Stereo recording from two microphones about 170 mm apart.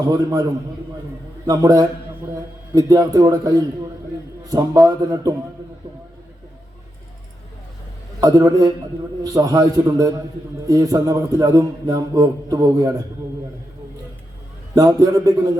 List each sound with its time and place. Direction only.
0.0 s a man's voice: 20° right (ahead or behind)
1.5 s a man's voice: 20° right (ahead or behind)
8.2 s a man's voice: 20° right (ahead or behind)
14.8 s a man's voice: 20° right (ahead or behind)